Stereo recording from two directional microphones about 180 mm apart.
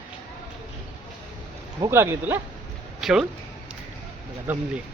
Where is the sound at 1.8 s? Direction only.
15° right (ahead or behind).